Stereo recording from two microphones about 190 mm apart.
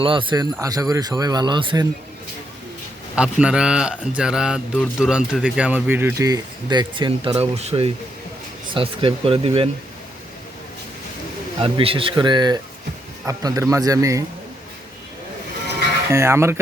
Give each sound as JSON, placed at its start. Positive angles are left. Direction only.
{"t": 0.0, "sound": "speech", "side_deg": -25}
{"t": 3.2, "sound": "speech", "side_deg": -5}
{"t": 11.6, "sound": "speech", "side_deg": -30}
{"t": 16.1, "sound": "speech", "side_deg": -15}